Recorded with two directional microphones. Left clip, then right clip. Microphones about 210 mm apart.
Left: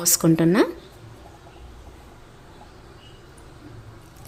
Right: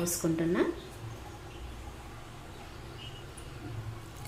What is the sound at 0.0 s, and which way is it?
Speech, 60° left (ahead or behind).